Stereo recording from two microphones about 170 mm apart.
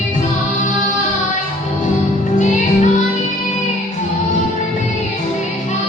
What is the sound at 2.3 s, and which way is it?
Music, 45° left (ahead or behind).